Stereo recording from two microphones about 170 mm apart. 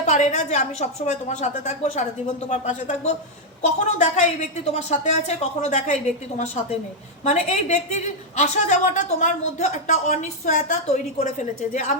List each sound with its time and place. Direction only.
0.0 s a woman's voice: 45° left (ahead or behind)
7.3 s a woman's voice: 45° left (ahead or behind)